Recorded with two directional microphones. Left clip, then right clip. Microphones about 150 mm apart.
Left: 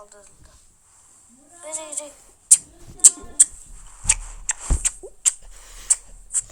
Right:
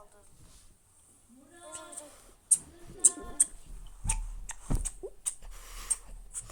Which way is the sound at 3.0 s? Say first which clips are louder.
Left 12 dB; 50° left (ahead or behind).